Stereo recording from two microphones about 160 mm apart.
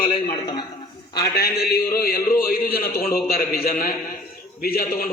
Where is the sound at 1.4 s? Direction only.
75° left (ahead or behind).